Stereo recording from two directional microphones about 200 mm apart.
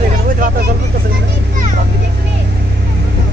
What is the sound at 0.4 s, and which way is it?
Vehicle, 50° right (ahead or behind).